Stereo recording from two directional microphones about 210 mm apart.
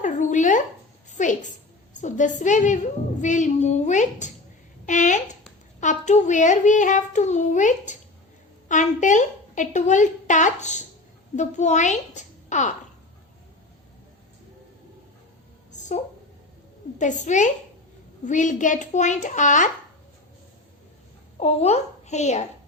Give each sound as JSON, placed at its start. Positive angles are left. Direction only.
{"t": 0.0, "sound": "a sound", "side_deg": 35}
{"t": 1.1, "sound": "a woman's voice", "side_deg": 35}
{"t": 17.0, "sound": "a woman's voice", "side_deg": 35}
{"t": 21.3, "sound": "a child's voice", "side_deg": 30}